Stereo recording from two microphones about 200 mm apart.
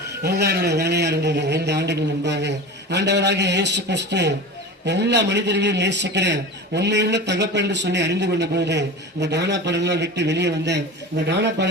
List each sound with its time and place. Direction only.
0.2 s a man's voice: 55° right (ahead or behind)